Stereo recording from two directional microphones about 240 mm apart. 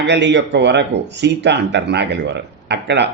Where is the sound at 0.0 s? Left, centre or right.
Right.